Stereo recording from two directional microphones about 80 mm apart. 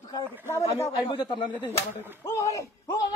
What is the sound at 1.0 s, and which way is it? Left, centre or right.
Speech, left.